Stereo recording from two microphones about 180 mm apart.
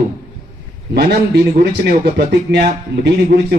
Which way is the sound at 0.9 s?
65° right (ahead or behind).